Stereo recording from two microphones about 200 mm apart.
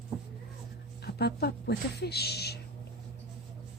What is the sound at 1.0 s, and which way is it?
A woman's voice, 55° left (ahead or behind).